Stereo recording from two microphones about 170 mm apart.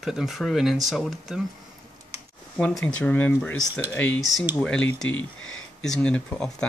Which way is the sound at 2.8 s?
10° left (ahead or behind).